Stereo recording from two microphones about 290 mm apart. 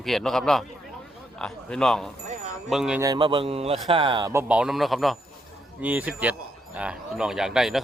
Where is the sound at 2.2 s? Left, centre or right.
Right.